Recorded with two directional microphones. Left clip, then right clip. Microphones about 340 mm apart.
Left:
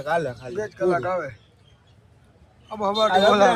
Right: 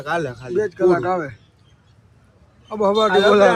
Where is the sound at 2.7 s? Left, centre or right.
Centre.